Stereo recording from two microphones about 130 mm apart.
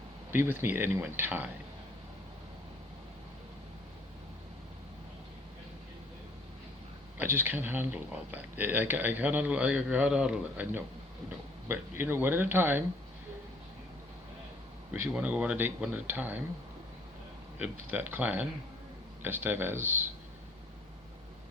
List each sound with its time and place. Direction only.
0.3 s speech: 15° right (ahead or behind)
7.2 s speech: 15° right (ahead or behind)
15.1 s speech: 10° right (ahead or behind)
17.6 s speech: 15° right (ahead or behind)